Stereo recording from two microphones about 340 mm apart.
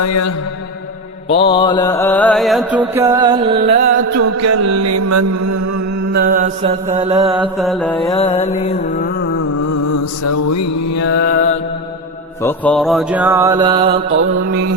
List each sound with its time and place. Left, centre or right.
0.0 s mantra: left
1.4 s mantra: centre
3.5 s mantra: right
4.4 s mantra: right
6.1 s mantra: right
7.3 s mantra: centre
8.1 s music: centre
9.9 s mantra: left
11.2 s music: left
12.4 s mantra: centre